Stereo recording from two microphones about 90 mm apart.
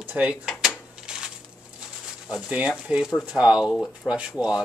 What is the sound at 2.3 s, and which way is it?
Speech, 10° right (ahead or behind).